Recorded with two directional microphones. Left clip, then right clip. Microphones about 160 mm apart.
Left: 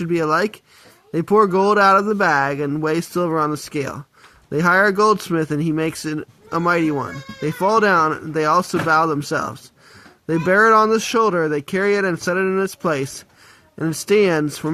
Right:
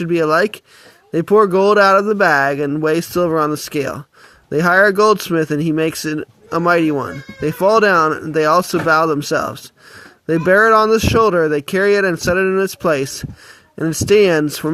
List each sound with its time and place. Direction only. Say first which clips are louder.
0.0 s speech: right 4 dB; 30° right (ahead or behind)